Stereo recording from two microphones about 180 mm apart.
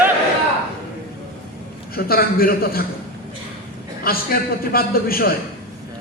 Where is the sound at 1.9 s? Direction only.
55° left (ahead or behind).